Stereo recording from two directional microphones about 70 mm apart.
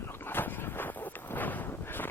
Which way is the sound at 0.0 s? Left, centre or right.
Left.